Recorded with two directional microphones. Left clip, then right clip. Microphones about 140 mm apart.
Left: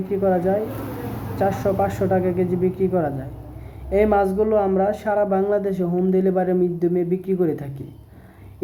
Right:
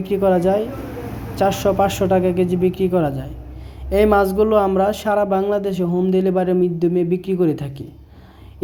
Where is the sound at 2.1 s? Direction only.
40° right (ahead or behind).